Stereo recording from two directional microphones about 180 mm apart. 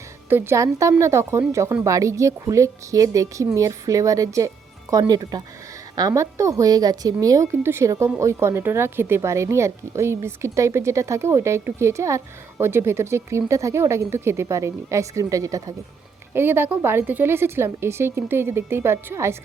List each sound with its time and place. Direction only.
0.3 s a woman's voice: 10° right (ahead or behind)